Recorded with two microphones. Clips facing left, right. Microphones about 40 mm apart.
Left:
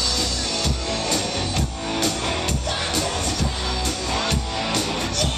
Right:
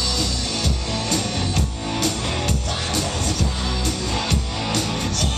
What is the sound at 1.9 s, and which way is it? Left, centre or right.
Music, centre.